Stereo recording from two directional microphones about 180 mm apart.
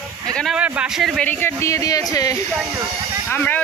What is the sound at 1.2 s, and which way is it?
Speech, 10° left (ahead or behind).